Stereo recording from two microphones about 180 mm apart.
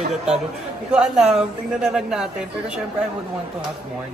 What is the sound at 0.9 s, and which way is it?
Speech, 5° right (ahead or behind).